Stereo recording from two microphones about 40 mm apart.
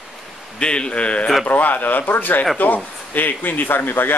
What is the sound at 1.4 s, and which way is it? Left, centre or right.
A man's voice, left.